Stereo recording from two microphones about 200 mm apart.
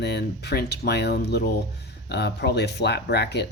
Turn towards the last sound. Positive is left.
turn(degrees=55)  # may be behind; listen again after turning